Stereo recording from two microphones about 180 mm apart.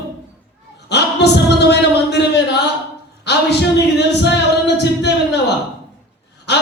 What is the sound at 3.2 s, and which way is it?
A capella, 70° left (ahead or behind).